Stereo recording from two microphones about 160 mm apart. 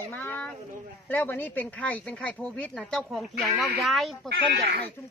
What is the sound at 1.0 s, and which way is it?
Speech, 10° left (ahead or behind).